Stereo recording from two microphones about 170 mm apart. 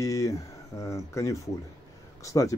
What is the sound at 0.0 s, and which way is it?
Speech, 20° left (ahead or behind).